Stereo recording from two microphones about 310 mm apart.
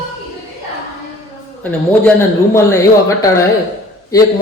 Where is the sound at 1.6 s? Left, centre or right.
Centre.